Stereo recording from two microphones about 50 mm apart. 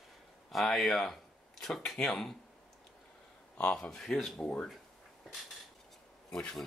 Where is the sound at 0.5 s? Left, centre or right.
Centre.